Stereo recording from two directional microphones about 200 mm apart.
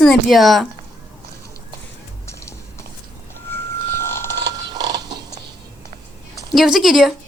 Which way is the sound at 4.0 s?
10° left (ahead or behind).